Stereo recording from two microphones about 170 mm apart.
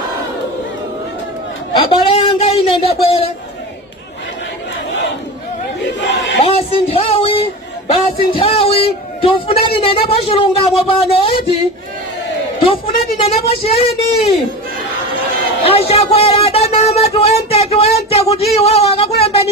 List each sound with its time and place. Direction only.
1.7 s speech: 30° left (ahead or behind)
5.8 s chatter: 90° left
6.4 s a sound: 35° left (ahead or behind)
9.6 s speech: 30° left (ahead or behind)
12.6 s a woman's voice: 30° left (ahead or behind)
15.6 s speech: 35° left (ahead or behind)